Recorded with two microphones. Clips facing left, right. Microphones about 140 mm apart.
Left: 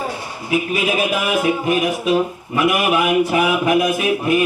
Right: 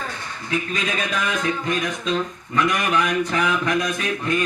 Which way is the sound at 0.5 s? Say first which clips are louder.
Left 7 dB; 10° left (ahead or behind).